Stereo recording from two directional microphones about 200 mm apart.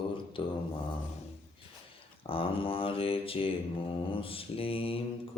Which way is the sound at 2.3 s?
25° left (ahead or behind).